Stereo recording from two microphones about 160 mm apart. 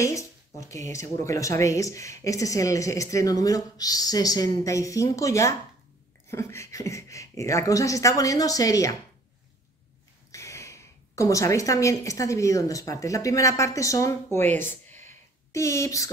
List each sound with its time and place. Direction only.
0.0 s speech: 20° left (ahead or behind)
10.3 s a woman's voice: 20° left (ahead or behind)